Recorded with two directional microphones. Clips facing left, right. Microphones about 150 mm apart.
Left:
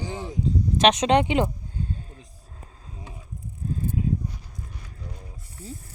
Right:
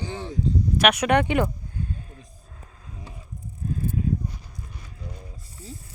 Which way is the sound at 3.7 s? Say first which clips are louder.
Even; 30° left (ahead or behind).